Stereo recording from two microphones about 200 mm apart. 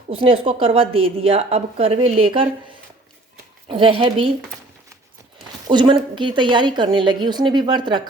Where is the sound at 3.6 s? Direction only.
25° right (ahead or behind).